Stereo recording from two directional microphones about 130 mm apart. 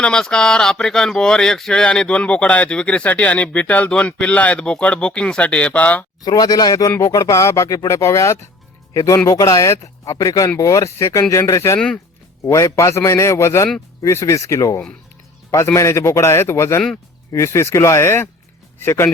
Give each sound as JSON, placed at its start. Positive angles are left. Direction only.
{"t": 0.0, "sound": "speech", "side_deg": 5}
{"t": 6.2, "sound": "speech", "side_deg": 30}